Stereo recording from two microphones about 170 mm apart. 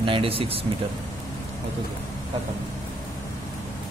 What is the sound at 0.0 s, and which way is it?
Speech, 30° right (ahead or behind).